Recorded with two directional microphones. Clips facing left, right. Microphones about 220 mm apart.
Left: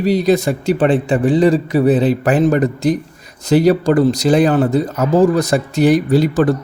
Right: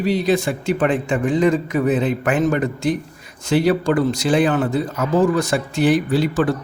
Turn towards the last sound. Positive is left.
turn(degrees=40)  # may be behind; listen again after turning